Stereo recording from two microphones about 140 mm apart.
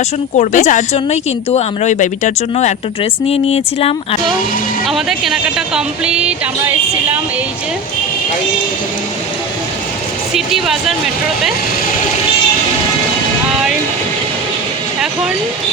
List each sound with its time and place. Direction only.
0.3 s speech: 55° left (ahead or behind)
3.0 s a woman's voice: 45° left (ahead or behind)
4.9 s speech: centre (ahead or behind)
10.3 s speech: centre (ahead or behind)